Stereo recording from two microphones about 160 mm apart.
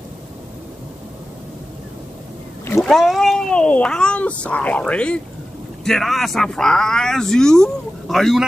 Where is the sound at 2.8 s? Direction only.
Centre (ahead or behind).